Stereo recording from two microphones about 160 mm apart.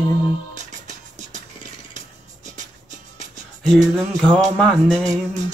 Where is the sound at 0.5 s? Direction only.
50° right (ahead or behind).